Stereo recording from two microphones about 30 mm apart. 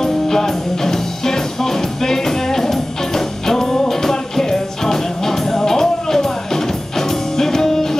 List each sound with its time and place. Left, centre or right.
0.0 s music: centre